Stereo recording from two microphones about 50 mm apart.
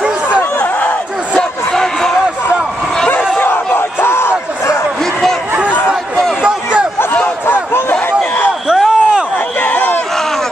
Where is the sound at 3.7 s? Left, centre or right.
Left.